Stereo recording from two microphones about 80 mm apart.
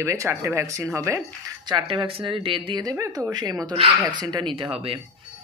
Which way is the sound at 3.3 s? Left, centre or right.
Right.